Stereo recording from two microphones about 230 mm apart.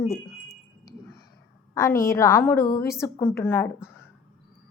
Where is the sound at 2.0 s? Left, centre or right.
Centre.